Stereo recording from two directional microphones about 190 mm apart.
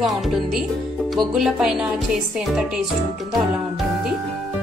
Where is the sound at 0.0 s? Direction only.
Centre (ahead or behind).